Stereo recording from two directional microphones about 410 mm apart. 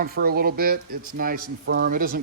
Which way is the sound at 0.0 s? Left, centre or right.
Right.